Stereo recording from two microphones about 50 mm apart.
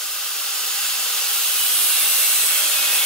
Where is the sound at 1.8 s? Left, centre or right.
Centre.